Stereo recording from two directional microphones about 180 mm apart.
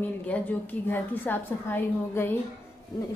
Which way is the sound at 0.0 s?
10° left (ahead or behind).